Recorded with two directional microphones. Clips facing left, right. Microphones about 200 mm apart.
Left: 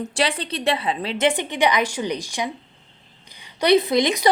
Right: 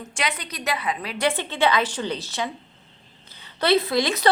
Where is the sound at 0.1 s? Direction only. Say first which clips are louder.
Left 2 dB; 35° left (ahead or behind).